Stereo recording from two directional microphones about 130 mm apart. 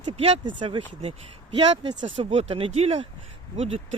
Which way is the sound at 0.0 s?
45° right (ahead or behind).